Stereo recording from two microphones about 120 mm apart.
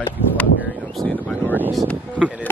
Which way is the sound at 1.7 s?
5° left (ahead or behind).